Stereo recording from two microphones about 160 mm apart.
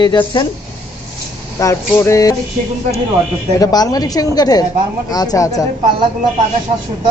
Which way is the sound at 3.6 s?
25° left (ahead or behind).